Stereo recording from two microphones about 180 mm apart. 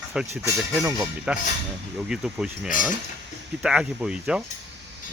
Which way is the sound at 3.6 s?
5° right (ahead or behind).